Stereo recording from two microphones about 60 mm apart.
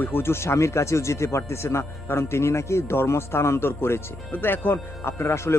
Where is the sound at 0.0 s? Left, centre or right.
Left.